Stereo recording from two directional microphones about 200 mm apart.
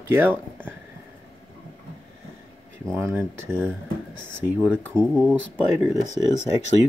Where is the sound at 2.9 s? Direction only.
10° right (ahead or behind).